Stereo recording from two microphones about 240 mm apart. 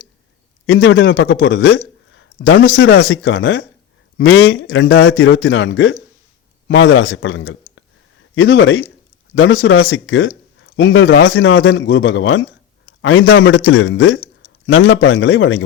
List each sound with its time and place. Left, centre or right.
0.7 s a man's voice: left